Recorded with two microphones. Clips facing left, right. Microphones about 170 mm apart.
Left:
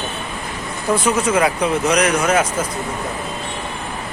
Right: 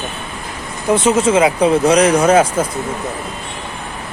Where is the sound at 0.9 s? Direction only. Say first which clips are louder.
Right 5 dB; 25° right (ahead or behind).